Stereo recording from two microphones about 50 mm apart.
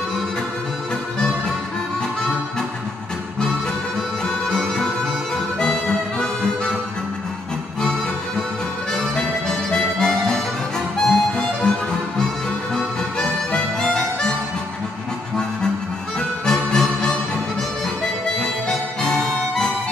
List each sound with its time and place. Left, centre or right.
4.5 s music: centre
5.6 s harmonica: centre
9.7 s music: centre
11.0 s harmonica: centre
12.7 s harmonica: centre
16.2 s music: centre
18.4 s harmonica: centre